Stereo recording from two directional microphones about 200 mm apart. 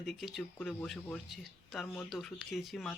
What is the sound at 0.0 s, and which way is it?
Speech, centre (ahead or behind).